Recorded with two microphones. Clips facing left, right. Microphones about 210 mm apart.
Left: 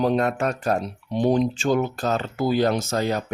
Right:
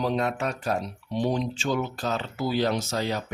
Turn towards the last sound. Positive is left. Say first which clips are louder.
# left 4 dB
turn(degrees=50)  # may be behind; listen again after turning